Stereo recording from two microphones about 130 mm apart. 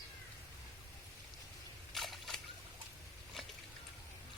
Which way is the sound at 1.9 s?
Centre (ahead or behind).